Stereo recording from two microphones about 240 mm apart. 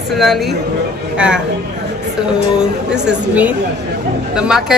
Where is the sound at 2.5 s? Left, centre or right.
Centre.